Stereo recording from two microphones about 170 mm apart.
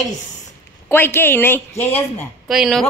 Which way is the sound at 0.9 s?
15° left (ahead or behind).